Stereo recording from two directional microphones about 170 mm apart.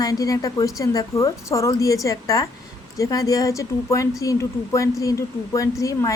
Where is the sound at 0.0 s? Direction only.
20° left (ahead or behind).